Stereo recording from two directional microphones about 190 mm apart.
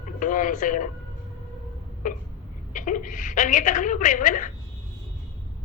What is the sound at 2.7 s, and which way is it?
A man's voice, 45° left (ahead or behind).